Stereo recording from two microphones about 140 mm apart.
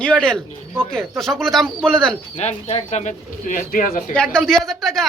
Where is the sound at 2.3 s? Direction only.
50° left (ahead or behind); by 4.1 s 75° left (ahead or behind).